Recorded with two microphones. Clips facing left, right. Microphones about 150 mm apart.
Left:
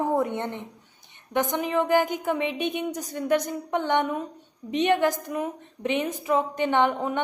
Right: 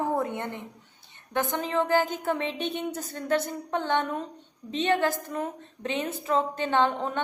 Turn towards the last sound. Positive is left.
turn(degrees=15)  # may be behind; listen again after turning